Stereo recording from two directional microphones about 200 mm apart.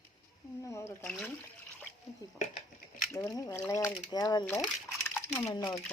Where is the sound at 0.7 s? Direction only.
10° left (ahead or behind).